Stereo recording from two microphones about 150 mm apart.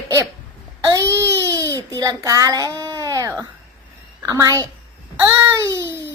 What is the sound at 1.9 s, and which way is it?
A child's voice, 25° right (ahead or behind).